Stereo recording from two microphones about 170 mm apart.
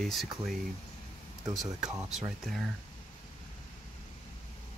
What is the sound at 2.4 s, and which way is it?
Speech, centre (ahead or behind).